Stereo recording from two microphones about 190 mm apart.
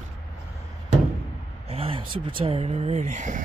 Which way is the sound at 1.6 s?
30° right (ahead or behind).